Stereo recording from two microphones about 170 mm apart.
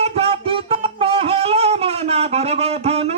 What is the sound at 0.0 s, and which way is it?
Music, 35° right (ahead or behind).